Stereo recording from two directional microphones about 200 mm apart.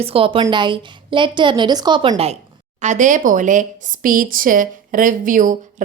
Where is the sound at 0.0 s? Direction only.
30° right (ahead or behind).